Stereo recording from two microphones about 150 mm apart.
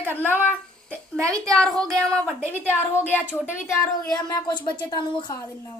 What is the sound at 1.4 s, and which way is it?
A child's voice, 5° left (ahead or behind).